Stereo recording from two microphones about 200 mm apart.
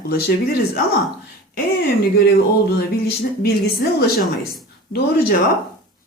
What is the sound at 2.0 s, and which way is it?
Speech, 55° left (ahead or behind).